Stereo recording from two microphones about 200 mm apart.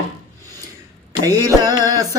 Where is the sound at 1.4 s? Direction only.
20° right (ahead or behind).